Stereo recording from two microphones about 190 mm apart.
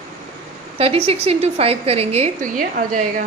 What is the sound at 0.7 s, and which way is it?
A woman's voice, 30° right (ahead or behind).